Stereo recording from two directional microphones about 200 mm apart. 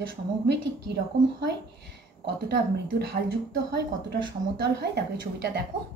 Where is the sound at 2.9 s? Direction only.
55° right (ahead or behind).